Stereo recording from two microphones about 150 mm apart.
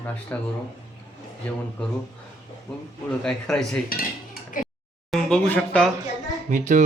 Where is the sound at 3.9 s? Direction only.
75° left (ahead or behind).